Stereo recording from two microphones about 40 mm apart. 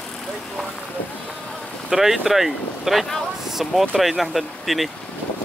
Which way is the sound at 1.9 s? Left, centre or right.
Centre.